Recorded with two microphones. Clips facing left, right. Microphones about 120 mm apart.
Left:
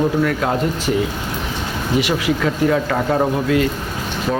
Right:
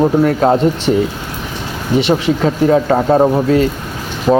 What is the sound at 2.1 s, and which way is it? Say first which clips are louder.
Speech: right 5 dB; 30° right (ahead or behind).